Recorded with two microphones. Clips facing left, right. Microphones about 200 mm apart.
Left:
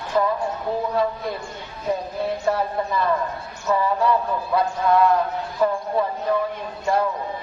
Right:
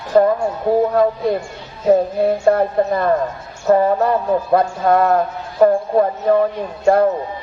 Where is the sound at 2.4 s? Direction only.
50° right (ahead or behind).